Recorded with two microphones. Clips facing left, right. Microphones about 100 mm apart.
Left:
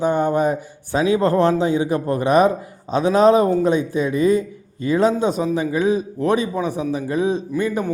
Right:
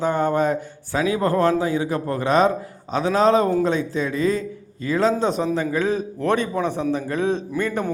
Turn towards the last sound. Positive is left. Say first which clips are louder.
# left 2 dB
turn(degrees=10)  # may be behind; listen again after turning